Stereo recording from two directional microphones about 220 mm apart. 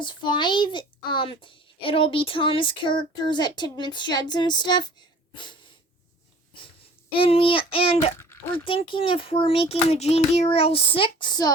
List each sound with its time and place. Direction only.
0.0 s a child's voice: 20° left (ahead or behind)
7.1 s a child's voice: 25° left (ahead or behind)